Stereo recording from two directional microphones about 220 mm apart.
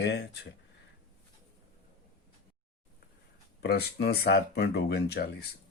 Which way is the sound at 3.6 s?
45° left (ahead or behind).